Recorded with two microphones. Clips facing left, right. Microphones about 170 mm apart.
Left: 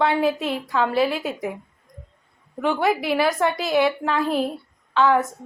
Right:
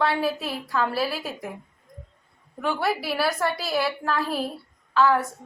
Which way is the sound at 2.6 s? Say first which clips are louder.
Left 5 dB; 15° left (ahead or behind).